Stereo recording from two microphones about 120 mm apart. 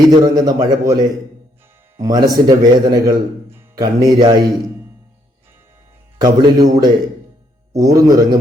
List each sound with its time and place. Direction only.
0.1 s speech: 35° right (ahead or behind)
6.1 s speech: 35° right (ahead or behind)